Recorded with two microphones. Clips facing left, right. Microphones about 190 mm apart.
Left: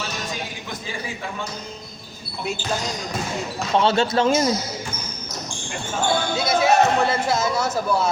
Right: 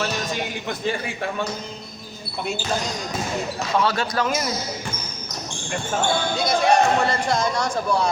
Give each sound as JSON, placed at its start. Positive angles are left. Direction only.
{"t": 3.8, "sound": "a man's voice", "side_deg": 25}
{"t": 6.3, "sound": "speech", "side_deg": 5}